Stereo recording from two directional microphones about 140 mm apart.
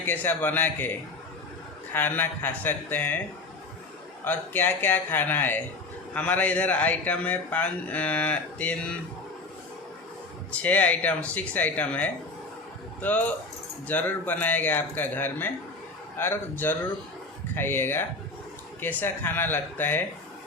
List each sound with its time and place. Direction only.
0.0 s a man's voice: 15° left (ahead or behind)
1.9 s a man's voice: 15° left (ahead or behind)
4.2 s a man's voice: 15° left (ahead or behind)
10.5 s a man's voice: 10° left (ahead or behind)